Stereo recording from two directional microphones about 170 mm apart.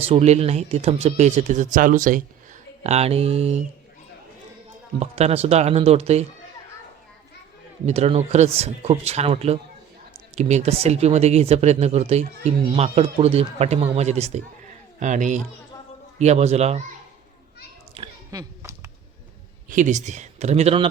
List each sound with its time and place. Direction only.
0.0 s speech: 35° right (ahead or behind); by 2.2 s 50° right (ahead or behind)
2.8 s speech: 40° right (ahead or behind)
4.9 s speech: 40° right (ahead or behind)
7.9 s a man's voice: 40° right (ahead or behind)
18.3 s a sound: 20° right (ahead or behind)
19.6 s speech: 50° right (ahead or behind)